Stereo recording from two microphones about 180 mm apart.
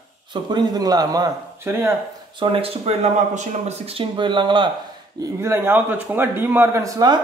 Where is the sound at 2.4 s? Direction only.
30° right (ahead or behind).